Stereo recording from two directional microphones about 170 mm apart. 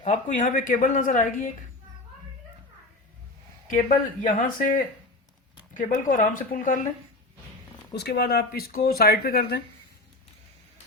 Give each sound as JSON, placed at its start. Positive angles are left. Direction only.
{"t": 0.0, "sound": "speech", "side_deg": 45}
{"t": 3.7, "sound": "speech", "side_deg": 50}
{"t": 7.9, "sound": "speech", "side_deg": 75}